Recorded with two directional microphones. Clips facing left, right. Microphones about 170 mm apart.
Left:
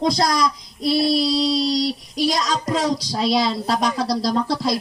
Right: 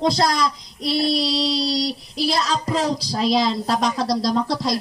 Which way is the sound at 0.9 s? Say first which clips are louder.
Left 2 dB; centre (ahead or behind).